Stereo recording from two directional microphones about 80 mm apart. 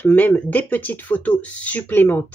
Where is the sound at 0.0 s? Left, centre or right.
Centre.